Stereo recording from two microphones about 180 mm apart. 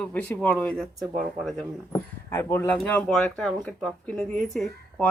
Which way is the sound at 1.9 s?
15° left (ahead or behind).